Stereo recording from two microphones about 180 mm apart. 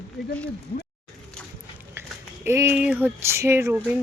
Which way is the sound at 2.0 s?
15° right (ahead or behind).